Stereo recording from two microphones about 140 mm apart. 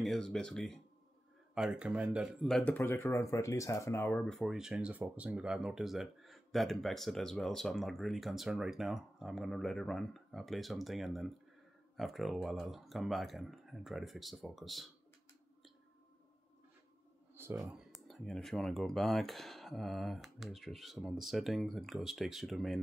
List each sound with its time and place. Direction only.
0.0 s speech: 5° left (ahead or behind)
2.4 s speech: 5° left (ahead or behind)
17.3 s a sound: 15° right (ahead or behind)
17.6 s speech: 5° right (ahead or behind)